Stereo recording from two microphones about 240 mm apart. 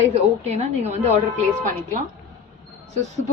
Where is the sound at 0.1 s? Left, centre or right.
Right.